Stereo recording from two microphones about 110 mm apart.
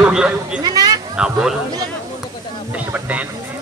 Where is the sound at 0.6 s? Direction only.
35° right (ahead or behind).